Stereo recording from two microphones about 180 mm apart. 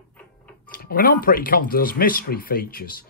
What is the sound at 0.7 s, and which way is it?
Speech, 50° left (ahead or behind).